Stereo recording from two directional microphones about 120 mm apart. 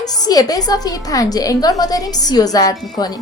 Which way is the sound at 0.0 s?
35° left (ahead or behind).